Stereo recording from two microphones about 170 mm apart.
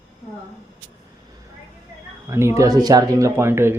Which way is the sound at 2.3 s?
15° right (ahead or behind).